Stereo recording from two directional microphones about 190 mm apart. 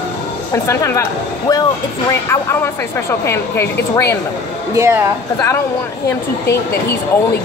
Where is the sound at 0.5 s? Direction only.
15° left (ahead or behind).